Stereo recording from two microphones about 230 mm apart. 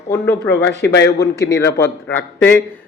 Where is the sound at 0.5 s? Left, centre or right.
Left.